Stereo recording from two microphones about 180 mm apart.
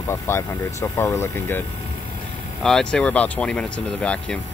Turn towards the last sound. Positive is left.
turn(degrees=5)  # may be behind; listen again after turning